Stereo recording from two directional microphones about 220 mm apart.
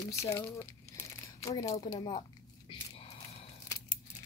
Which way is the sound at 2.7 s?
25° left (ahead or behind).